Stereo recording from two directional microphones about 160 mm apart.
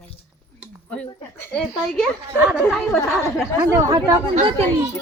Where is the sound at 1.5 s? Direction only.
Centre (ahead or behind).